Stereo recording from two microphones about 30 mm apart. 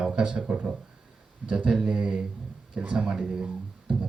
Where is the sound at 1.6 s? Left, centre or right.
Centre.